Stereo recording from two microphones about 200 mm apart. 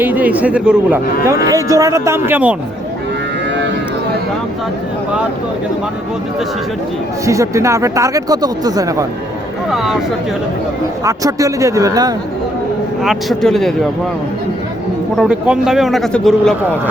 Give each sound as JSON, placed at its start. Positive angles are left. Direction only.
{"t": 0.0, "sound": "speech", "side_deg": -10}
{"t": 7.3, "sound": "speech", "side_deg": -15}
{"t": 9.6, "sound": "a man's voice", "side_deg": 0}
{"t": 11.0, "sound": "speech", "side_deg": -15}
{"t": 13.0, "sound": "a man's voice", "side_deg": 0}
{"t": 15.2, "sound": "a man's voice", "side_deg": -5}